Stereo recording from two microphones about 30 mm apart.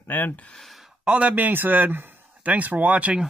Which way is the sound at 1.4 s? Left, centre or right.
Right.